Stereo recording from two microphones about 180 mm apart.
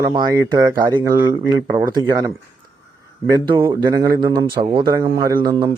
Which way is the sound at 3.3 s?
25° right (ahead or behind).